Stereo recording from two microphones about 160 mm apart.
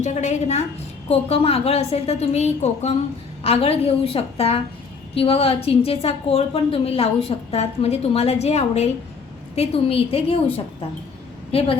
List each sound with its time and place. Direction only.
0.0 s a woman's voice: 45° left (ahead or behind)
11.5 s a woman's voice: 40° left (ahead or behind)